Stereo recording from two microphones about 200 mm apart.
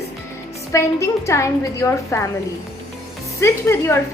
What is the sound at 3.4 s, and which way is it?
Speech, 10° left (ahead or behind).